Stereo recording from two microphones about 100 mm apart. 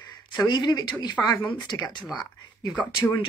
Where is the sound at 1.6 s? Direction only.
40° left (ahead or behind).